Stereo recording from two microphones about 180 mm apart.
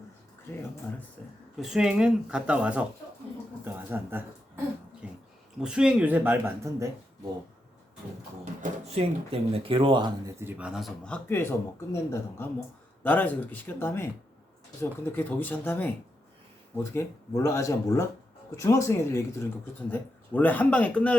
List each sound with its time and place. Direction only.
0.5 s speech: 15° left (ahead or behind); by 4.6 s 10° right (ahead or behind)
5.0 s a sound: 5° right (ahead or behind)
5.5 s speech: 5° right (ahead or behind)
9.0 s speech: 35° right (ahead or behind)
10.4 s speech: 5° right (ahead or behind)